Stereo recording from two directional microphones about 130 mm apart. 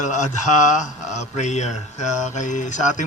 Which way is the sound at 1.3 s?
65° left (ahead or behind).